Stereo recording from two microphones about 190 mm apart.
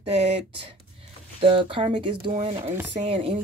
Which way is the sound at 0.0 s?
35° right (ahead or behind).